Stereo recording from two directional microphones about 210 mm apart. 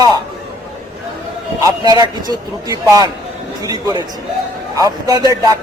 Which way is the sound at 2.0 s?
20° right (ahead or behind).